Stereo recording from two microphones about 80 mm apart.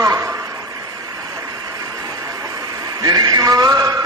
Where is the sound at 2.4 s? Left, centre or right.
Right.